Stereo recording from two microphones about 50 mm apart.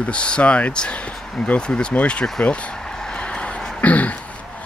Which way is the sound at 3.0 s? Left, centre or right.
Centre.